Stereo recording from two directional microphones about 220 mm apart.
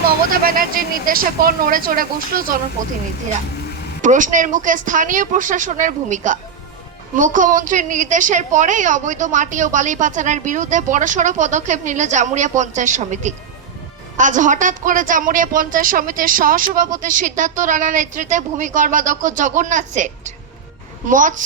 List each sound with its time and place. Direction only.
0.3 s a woman's voice: 40° right (ahead or behind)
4.0 s a woman's voice: 35° right (ahead or behind)